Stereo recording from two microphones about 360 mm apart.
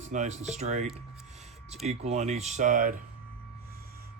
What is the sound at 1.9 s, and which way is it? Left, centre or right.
Speech, centre.